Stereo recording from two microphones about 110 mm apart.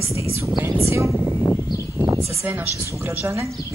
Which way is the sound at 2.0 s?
25° right (ahead or behind).